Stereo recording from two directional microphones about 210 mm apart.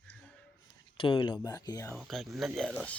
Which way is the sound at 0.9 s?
20° left (ahead or behind).